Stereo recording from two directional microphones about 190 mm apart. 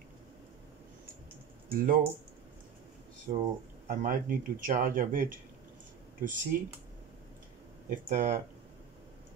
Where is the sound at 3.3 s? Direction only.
45° right (ahead or behind).